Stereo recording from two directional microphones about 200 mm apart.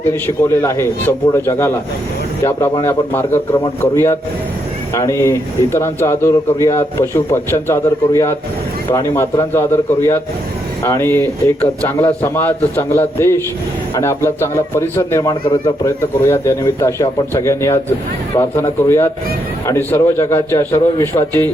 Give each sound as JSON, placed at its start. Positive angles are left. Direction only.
{"t": 0.1, "sound": "speech", "side_deg": 15}